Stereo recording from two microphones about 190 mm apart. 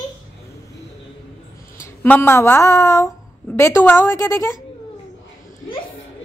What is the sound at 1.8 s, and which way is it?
Speech, 10° left (ahead or behind).